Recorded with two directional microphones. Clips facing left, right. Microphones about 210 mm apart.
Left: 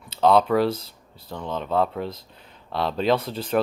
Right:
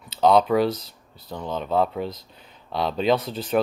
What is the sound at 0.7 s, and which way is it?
Speech, 30° left (ahead or behind).